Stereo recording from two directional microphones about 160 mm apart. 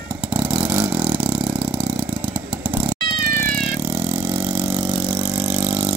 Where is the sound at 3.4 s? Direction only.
60° right (ahead or behind).